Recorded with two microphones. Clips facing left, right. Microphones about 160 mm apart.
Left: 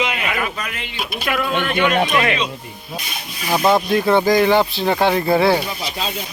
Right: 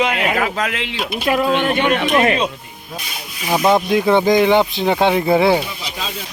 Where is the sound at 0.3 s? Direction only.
80° right.